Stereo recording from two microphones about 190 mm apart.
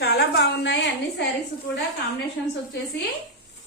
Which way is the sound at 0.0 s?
55° left (ahead or behind).